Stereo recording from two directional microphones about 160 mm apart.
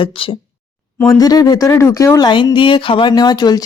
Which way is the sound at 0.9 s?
20° left (ahead or behind).